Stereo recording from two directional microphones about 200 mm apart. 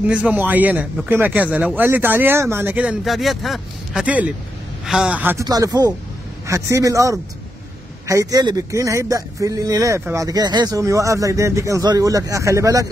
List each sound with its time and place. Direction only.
0.0 s speech: 5° right (ahead or behind)